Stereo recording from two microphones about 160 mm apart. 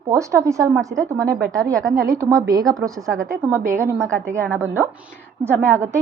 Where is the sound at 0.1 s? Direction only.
20° right (ahead or behind).